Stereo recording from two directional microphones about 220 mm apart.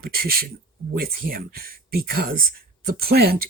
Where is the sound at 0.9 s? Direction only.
40° right (ahead or behind).